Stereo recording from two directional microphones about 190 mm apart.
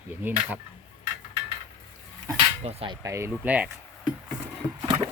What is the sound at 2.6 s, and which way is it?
Cutlery, 30° right (ahead or behind).